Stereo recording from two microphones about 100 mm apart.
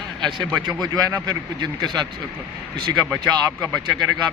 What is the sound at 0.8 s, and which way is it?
Speech, 45° right (ahead or behind).